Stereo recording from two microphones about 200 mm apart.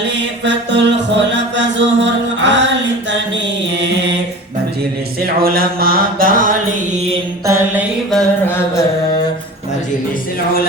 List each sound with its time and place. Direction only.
0.4 s mantra: 60° right (ahead or behind)
5.2 s mantra: 50° right (ahead or behind)
7.4 s mantra: 15° right (ahead or behind)
8.1 s music: 10° left (ahead or behind)